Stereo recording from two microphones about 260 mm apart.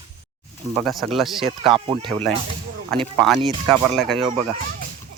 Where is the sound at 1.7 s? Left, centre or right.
Centre.